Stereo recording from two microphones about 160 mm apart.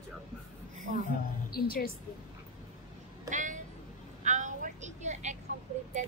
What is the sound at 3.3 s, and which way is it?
Music, 50° right (ahead or behind).